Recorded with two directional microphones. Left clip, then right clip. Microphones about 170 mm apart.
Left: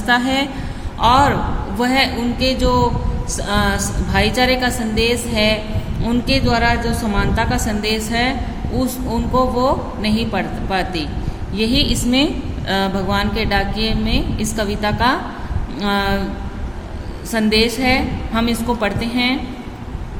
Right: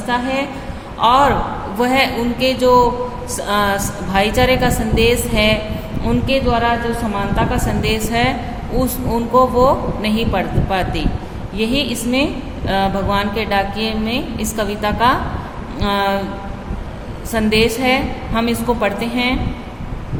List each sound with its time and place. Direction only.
0.1 s a woman's voice: 35° left (ahead or behind)
0.9 s a woman's voice: 20° left (ahead or behind)
17.3 s a woman's voice: 20° left (ahead or behind)